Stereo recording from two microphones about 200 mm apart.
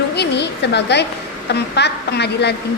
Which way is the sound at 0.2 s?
60° left (ahead or behind).